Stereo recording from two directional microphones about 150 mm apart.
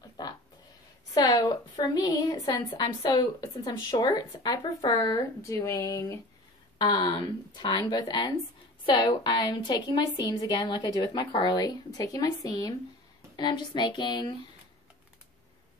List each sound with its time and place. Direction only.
0.2 s a sound: 25° left (ahead or behind)
1.1 s a woman's voice: 25° left (ahead or behind)
6.8 s a woman's voice: 30° left (ahead or behind)